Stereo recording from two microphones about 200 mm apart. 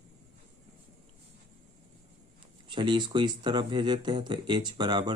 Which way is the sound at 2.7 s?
25° right (ahead or behind).